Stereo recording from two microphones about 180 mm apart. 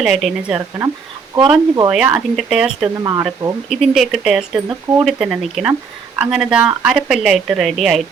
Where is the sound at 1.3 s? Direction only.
20° right (ahead or behind).